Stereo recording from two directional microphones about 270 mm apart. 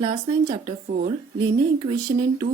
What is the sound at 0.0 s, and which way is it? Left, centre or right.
Speech, centre.